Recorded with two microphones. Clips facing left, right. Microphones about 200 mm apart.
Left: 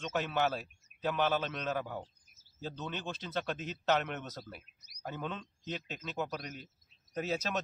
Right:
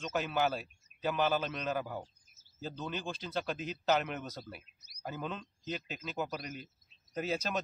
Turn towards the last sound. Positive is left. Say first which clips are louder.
# even
turn(degrees=0)  # may be behind; listen again after turning